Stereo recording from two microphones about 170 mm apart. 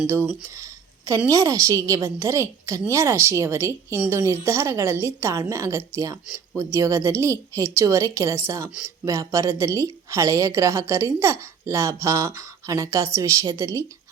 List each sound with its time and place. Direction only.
0.5 s a woman's voice: 20° right (ahead or behind)